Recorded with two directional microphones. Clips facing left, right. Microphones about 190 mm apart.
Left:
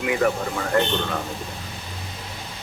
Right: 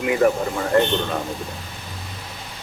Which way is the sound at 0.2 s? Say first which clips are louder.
Right 4 dB; 30° right (ahead or behind).